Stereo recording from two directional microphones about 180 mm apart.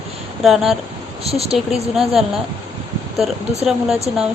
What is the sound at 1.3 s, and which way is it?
Speech, 35° right (ahead or behind).